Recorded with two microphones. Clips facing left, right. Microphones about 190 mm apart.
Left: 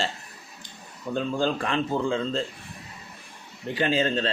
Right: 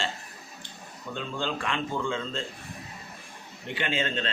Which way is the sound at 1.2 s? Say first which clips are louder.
Left 7 dB; 40° left (ahead or behind).